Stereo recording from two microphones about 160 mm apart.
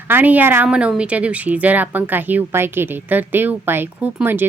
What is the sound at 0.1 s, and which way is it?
A woman's voice, 10° right (ahead or behind).